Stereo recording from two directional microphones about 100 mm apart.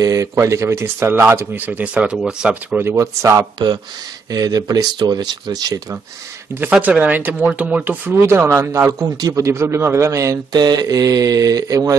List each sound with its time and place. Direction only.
0.0 s speech: 35° right (ahead or behind)
1.7 s speech: 10° right (ahead or behind)
2.8 s speech: 30° right (ahead or behind)
3.5 s a man's voice: 45° right (ahead or behind)
6.7 s a man's voice: 15° right (ahead or behind); by 11.9 s 35° right (ahead or behind)